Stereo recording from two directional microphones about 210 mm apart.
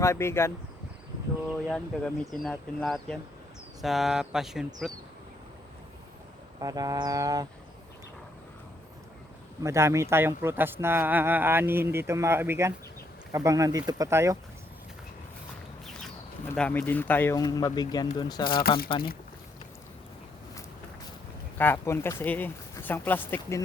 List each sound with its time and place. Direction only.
0.0 s speech: 10° left (ahead or behind)
1.6 s speech: 5° left (ahead or behind)
6.6 s a man's voice: 15° right (ahead or behind)
9.6 s a man's voice: 15° right (ahead or behind)
16.5 s speech: 5° left (ahead or behind)
21.6 s speech: 10° left (ahead or behind)